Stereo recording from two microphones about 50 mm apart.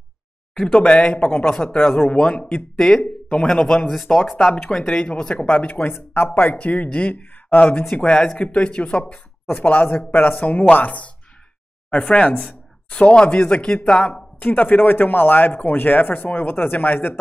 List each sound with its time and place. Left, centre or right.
0.7 s speech: centre
1.1 s speech: left
1.8 s speech: left
2.0 s speech: left
3.9 s speech: centre
4.6 s speech: centre
5.7 s speech: left
6.6 s speech: left
7.9 s speech: centre
9.5 s speech: left
14.4 s speech: left